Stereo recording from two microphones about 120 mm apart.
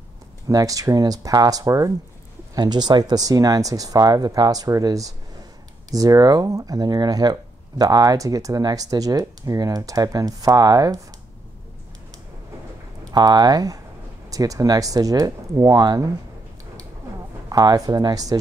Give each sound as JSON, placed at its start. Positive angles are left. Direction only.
{"t": 0.5, "sound": "speech", "side_deg": -30}
{"t": 13.0, "sound": "speech", "side_deg": -35}
{"t": 17.5, "sound": "speech", "side_deg": -30}